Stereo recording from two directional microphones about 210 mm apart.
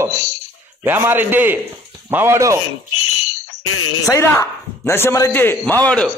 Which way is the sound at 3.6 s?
90° left.